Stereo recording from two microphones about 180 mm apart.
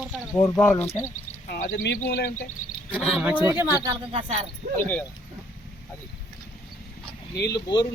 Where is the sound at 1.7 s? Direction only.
70° left (ahead or behind).